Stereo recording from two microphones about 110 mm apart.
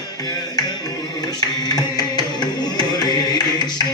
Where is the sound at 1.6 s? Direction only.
40° left (ahead or behind).